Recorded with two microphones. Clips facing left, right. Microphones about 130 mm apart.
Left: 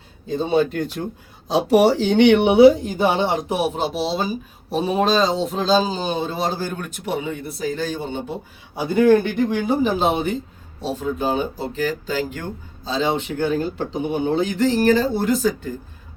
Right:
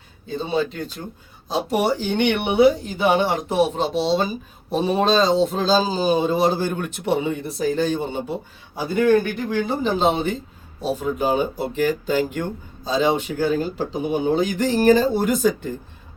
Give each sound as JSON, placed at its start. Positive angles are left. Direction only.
{"t": 0.3, "sound": "speech", "side_deg": 45}
{"t": 1.5, "sound": "speech", "side_deg": 85}
{"t": 2.8, "sound": "speech", "side_deg": 45}
{"t": 3.2, "sound": "speech", "side_deg": 20}
{"t": 7.9, "sound": "speech", "side_deg": -15}
{"t": 8.7, "sound": "a man's voice", "side_deg": 20}
{"t": 10.8, "sound": "speech", "side_deg": -10}